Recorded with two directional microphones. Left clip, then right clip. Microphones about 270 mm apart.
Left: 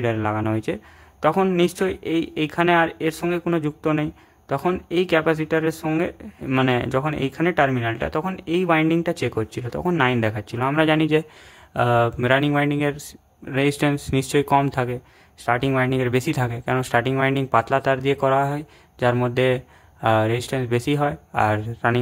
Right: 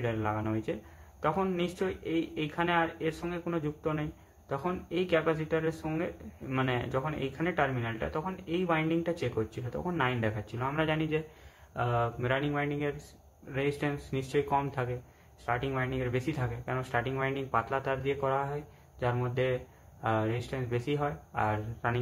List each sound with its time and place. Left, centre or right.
0.0 s speech: left